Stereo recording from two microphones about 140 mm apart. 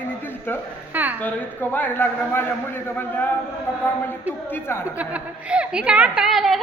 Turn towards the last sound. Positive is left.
turn(degrees=0)  # may be behind; listen again after turning